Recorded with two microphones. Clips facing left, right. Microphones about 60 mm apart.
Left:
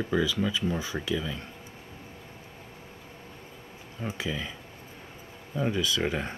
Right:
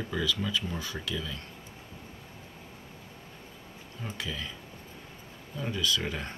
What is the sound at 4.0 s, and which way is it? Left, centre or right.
Speech, centre.